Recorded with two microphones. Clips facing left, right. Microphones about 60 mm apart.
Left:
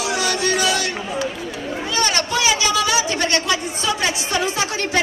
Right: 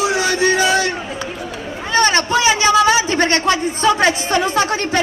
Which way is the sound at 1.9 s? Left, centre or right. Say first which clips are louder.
Right 7 dB; right.